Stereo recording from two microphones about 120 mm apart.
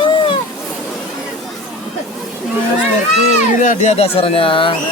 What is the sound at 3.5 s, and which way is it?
Speech, 90° left.